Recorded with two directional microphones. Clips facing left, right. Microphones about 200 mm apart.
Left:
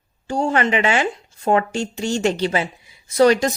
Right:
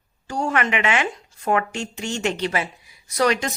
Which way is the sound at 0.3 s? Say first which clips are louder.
Left 4 dB; 30° left (ahead or behind).